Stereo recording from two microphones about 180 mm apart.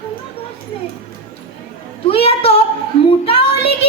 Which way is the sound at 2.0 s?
30° left (ahead or behind).